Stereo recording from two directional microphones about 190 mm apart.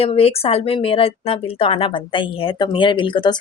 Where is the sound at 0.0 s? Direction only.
30° left (ahead or behind).